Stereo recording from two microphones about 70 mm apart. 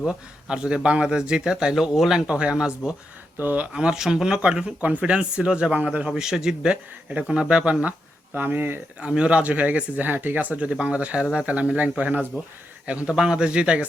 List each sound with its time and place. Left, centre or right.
0.0 s speech: centre
3.3 s speech: right
3.7 s speech: centre
6.1 s speech: centre
8.4 s speech: right
9.0 s speech: centre